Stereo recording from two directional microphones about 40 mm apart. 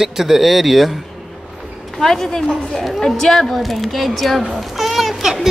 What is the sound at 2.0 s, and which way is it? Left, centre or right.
A woman's voice, centre.